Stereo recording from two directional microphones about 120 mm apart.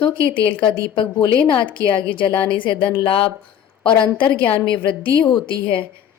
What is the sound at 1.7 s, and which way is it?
A woman's voice, 45° left (ahead or behind).